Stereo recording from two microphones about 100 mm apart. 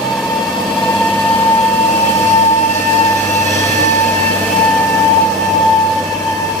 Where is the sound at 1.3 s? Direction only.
20° left (ahead or behind).